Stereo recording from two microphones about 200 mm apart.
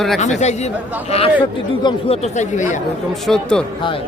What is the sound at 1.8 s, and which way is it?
Speech, 25° left (ahead or behind).